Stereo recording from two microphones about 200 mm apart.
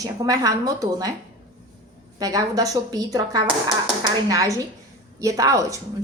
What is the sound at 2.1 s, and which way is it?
A woman's voice, 20° right (ahead or behind).